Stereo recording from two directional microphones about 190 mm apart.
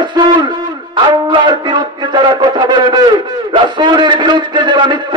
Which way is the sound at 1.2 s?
25° right (ahead or behind).